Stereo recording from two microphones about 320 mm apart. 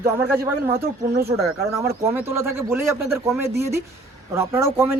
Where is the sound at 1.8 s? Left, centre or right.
Centre.